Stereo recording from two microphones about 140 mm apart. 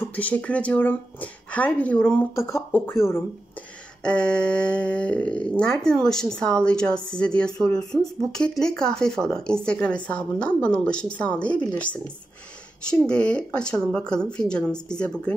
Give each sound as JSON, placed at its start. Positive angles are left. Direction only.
{"t": 0.0, "sound": "speech", "side_deg": 10}
{"t": 4.0, "sound": "speech", "side_deg": 5}
{"t": 13.0, "sound": "speech", "side_deg": 5}